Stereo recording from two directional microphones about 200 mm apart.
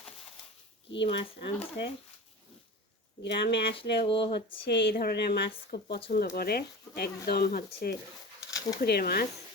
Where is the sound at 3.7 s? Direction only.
25° left (ahead or behind).